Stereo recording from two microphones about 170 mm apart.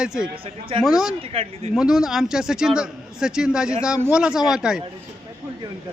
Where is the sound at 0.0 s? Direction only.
5° right (ahead or behind).